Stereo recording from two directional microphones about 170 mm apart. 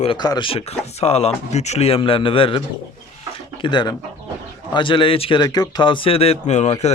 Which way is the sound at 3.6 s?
25° left (ahead or behind).